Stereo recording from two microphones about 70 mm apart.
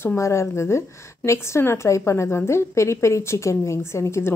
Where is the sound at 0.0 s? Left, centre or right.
Left.